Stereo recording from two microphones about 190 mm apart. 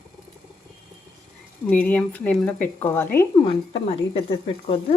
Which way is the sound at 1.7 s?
5° left (ahead or behind).